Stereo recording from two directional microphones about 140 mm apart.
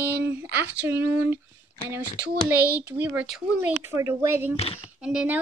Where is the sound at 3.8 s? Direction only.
20° right (ahead or behind).